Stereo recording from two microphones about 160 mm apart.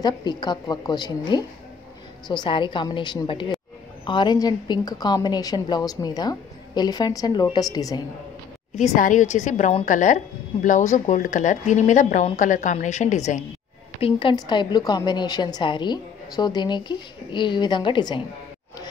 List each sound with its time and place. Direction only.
0.0 s a woman's voice: 25° left (ahead or behind)
8.7 s speech: 50° left (ahead or behind)
14.0 s a woman's voice: 25° left (ahead or behind)